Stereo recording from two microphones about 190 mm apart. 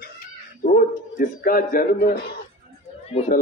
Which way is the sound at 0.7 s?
50° left (ahead or behind).